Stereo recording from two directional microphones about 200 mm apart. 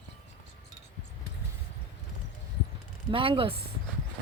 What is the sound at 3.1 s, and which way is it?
Speech, 25° right (ahead or behind).